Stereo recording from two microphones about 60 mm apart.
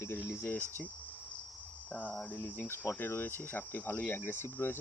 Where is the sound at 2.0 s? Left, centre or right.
Left.